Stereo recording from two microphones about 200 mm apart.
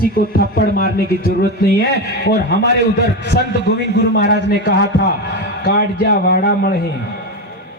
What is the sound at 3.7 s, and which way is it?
A man's voice, 55° left (ahead or behind).